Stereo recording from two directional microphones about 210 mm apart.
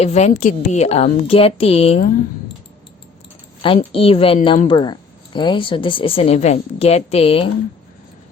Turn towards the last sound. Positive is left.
turn(degrees=25)  # may be behind; listen again after turning